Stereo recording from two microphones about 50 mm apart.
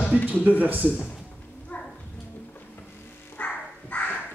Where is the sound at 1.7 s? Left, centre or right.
Left.